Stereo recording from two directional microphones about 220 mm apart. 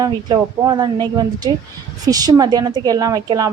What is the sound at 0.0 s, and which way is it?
A woman's voice, 15° right (ahead or behind).